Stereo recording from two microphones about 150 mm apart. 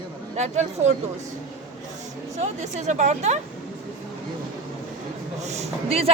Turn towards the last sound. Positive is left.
turn(degrees=-40)  # may be behind; listen again after turning